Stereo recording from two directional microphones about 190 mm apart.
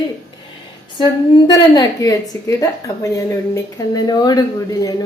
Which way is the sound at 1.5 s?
20° left (ahead or behind).